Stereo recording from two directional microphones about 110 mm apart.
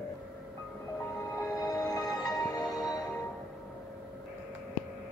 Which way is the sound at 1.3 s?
35° left (ahead or behind).